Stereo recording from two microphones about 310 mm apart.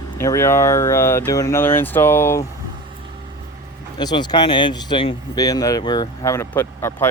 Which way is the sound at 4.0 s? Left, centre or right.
Centre.